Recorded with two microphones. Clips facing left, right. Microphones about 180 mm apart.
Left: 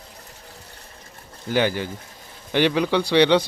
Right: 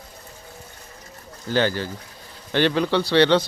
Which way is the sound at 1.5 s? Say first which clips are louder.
Even; 15° left (ahead or behind).